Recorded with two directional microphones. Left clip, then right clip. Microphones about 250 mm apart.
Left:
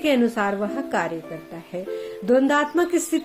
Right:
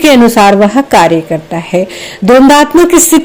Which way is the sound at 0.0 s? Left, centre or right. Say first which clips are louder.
Right 17 dB; right.